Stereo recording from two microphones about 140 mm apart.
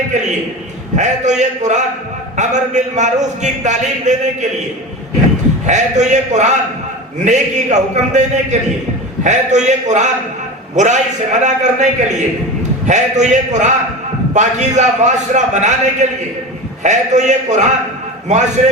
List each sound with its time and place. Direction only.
0.1 s a man's voice: 60° right (ahead or behind)
5.6 s a man's voice: 55° right (ahead or behind)